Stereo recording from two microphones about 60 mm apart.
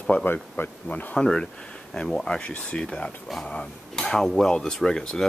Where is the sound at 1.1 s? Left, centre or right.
Centre.